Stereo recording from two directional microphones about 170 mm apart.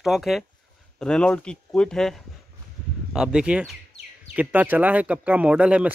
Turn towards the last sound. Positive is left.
turn(degrees=-5)  # may be behind; listen again after turning